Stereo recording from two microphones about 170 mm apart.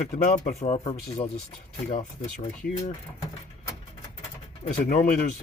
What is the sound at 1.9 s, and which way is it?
Speech, 50° left (ahead or behind).